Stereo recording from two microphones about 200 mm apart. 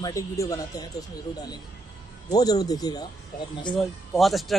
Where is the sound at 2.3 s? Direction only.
20° left (ahead or behind).